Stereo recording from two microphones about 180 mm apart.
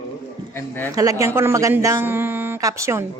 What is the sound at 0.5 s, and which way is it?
Speech, 10° left (ahead or behind).